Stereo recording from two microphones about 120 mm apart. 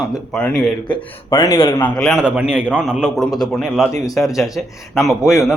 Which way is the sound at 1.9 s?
5° left (ahead or behind).